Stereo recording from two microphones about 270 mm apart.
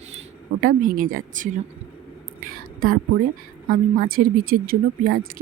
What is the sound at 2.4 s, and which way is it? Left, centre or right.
Whispering, right.